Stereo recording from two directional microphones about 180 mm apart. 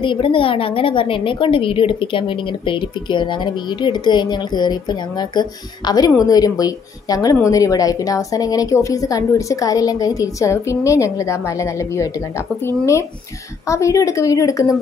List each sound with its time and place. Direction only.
0.0 s a woman's voice: 25° left (ahead or behind)